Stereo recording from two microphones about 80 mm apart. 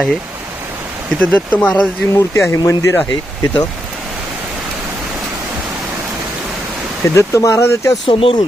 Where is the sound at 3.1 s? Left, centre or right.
Left.